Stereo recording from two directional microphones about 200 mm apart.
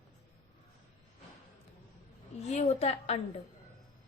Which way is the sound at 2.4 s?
35° left (ahead or behind).